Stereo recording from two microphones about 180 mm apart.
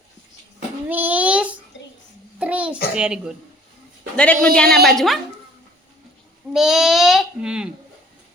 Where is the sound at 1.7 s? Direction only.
85° left.